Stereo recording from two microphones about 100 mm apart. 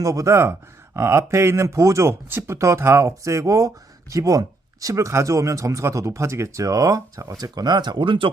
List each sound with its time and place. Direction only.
0.0 s speech: 35° right (ahead or behind); by 8.3 s 55° right (ahead or behind)